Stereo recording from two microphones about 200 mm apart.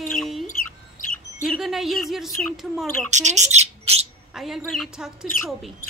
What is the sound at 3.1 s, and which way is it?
Speech, 35° right (ahead or behind).